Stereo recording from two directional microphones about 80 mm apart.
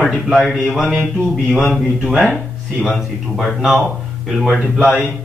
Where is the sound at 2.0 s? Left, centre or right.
Centre.